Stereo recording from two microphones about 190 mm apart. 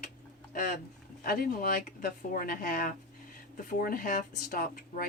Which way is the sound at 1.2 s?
50° left (ahead or behind).